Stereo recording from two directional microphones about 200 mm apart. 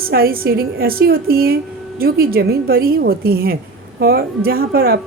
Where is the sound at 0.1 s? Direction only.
50° right (ahead or behind).